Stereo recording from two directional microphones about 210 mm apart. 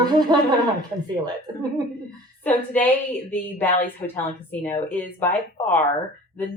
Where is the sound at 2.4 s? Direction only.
10° left (ahead or behind).